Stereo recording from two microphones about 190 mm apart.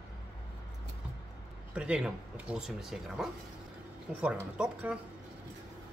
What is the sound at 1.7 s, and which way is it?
Speech, 5° right (ahead or behind).